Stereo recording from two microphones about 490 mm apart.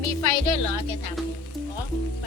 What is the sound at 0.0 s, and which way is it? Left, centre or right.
Speech, right.